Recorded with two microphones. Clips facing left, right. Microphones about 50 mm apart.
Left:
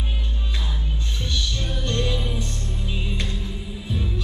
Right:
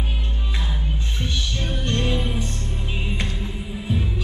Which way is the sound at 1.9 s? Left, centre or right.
Right.